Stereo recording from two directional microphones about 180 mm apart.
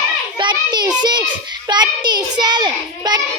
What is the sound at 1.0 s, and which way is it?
Child singing, 25° right (ahead or behind).